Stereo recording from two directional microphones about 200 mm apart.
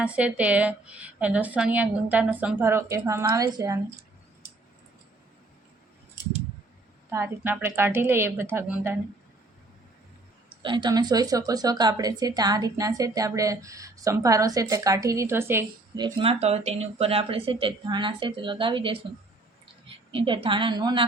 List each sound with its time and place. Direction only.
0.0 s a woman's voice: 5° right (ahead or behind)
7.1 s a woman's voice: 10° right (ahead or behind)
10.6 s a woman's voice: 25° right (ahead or behind)
20.1 s a woman's voice: 25° right (ahead or behind)